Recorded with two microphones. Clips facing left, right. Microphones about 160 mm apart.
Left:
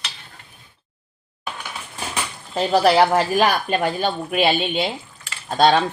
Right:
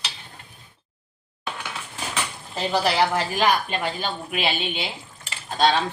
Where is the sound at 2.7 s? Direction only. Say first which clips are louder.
Left 6 dB; 45° left (ahead or behind).